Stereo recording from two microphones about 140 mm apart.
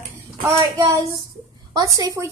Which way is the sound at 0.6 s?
20° right (ahead or behind).